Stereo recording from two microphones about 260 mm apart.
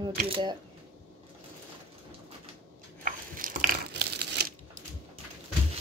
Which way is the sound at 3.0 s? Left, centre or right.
Right.